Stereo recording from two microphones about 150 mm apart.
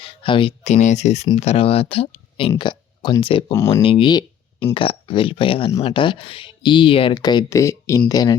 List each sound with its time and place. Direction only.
0.0 s a sound: 35° left (ahead or behind)
0.6 s speech: 50° left (ahead or behind); by 3.4 s 35° left (ahead or behind)
3.5 s speech: 20° left (ahead or behind)
3.8 s speech: 35° left (ahead or behind)